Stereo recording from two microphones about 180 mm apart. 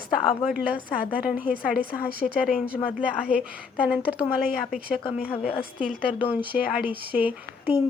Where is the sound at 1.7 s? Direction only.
60° left (ahead or behind).